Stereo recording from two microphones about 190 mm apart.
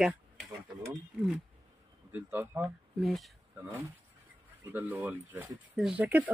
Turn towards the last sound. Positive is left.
turn(degrees=-10)  # may be behind; listen again after turning